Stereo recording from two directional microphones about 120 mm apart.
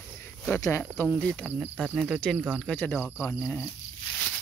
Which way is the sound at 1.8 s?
5° right (ahead or behind).